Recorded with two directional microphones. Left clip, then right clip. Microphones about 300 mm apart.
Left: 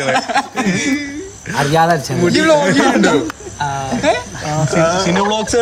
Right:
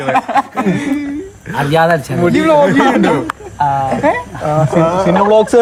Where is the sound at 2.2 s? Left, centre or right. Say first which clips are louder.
Right 1 dB; centre.